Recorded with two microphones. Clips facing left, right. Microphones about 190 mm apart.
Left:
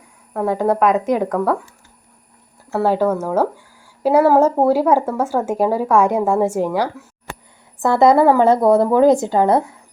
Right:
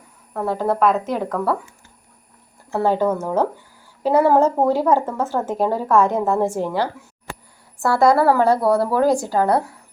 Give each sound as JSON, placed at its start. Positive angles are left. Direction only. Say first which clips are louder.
{"t": 0.3, "sound": "a woman's voice", "louder": "left 3 dB", "side_deg": 10}
{"t": 2.6, "sound": "a woman's voice", "louder": "left 2 dB", "side_deg": 5}
{"t": 7.8, "sound": "a woman's voice", "louder": "left 3 dB", "side_deg": 20}